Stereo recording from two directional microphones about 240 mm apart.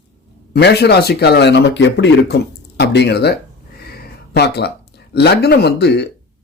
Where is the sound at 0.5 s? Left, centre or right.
Left.